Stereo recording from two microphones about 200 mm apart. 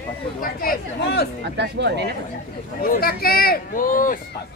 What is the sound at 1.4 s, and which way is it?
Speech, 60° right (ahead or behind).